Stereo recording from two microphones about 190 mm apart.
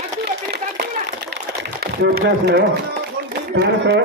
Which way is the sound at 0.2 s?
60° right (ahead or behind).